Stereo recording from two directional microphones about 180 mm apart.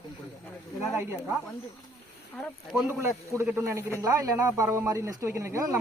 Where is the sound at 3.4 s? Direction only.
15° right (ahead or behind).